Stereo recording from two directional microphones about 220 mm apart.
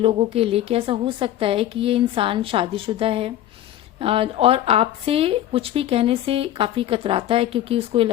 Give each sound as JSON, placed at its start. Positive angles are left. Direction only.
{"t": 0.0, "sound": "speech", "side_deg": -25}